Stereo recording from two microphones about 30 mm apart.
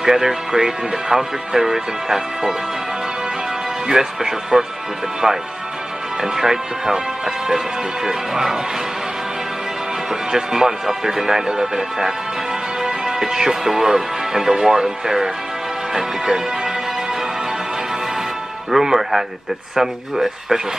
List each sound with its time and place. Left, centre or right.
0.0 s speech: centre
3.9 s music: centre
6.2 s speech: centre
10.3 s speech: centre
11.5 s music: right
12.8 s speech: right
15.9 s music: centre
18.7 s speech: centre